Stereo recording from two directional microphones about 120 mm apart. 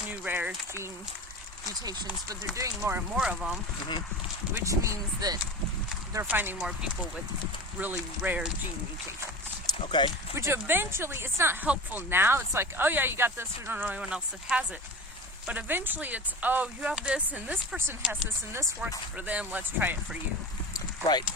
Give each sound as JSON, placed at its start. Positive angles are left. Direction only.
{"t": 0.1, "sound": "a sound", "side_deg": -15}
{"t": 2.3, "sound": "speech", "side_deg": -30}
{"t": 3.2, "sound": "speech", "side_deg": -5}
{"t": 4.6, "sound": "speech", "side_deg": -25}
{"t": 6.2, "sound": "speech", "side_deg": -15}
{"t": 7.8, "sound": "speech", "side_deg": -15}
{"t": 9.8, "sound": "speech", "side_deg": 40}
{"t": 10.3, "sound": "speech", "side_deg": -20}
{"t": 15.4, "sound": "speech", "side_deg": -15}
{"t": 20.7, "sound": "clip-clop", "side_deg": 35}